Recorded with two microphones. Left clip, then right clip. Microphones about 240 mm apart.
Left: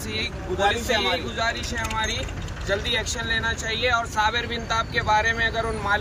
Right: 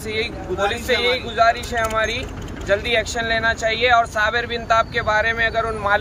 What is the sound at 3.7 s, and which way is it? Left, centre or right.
Speech, centre.